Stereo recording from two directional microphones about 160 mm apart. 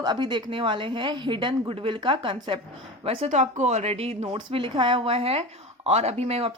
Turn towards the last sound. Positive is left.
turn(degrees=-40)  # may be behind; listen again after turning